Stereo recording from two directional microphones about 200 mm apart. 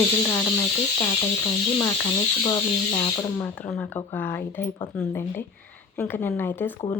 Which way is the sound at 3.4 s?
5° left (ahead or behind).